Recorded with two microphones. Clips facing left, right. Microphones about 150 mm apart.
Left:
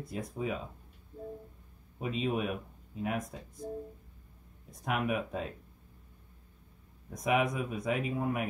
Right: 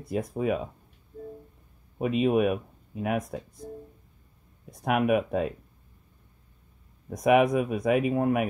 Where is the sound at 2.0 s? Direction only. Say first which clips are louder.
Right 9 dB; 65° right (ahead or behind).